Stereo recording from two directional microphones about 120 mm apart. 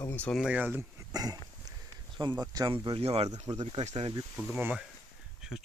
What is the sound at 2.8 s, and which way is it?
Speech, 50° right (ahead or behind).